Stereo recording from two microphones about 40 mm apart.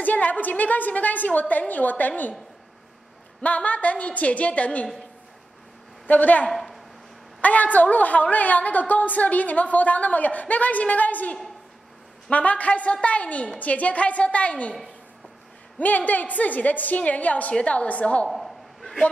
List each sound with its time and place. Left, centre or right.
0.0 s a woman's voice: left
3.4 s a woman's voice: left
6.0 s a woman's voice: left
6.5 s a sound: centre
7.4 s a woman's voice: left
16.1 s a woman's voice: left
18.3 s a sound: centre